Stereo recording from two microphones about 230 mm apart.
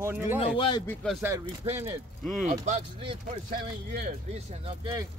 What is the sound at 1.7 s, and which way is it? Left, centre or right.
Speech, centre.